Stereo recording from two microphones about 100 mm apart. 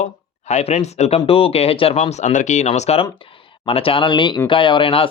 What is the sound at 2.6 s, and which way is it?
Speech, 90° left.